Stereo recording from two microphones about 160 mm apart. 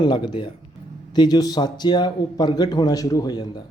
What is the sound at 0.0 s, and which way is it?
A man's voice, 30° left (ahead or behind).